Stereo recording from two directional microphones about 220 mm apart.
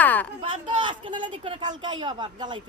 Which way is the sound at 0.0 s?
5° left (ahead or behind).